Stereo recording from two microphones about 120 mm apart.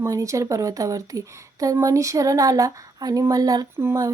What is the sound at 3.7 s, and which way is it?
Speech, 20° right (ahead or behind).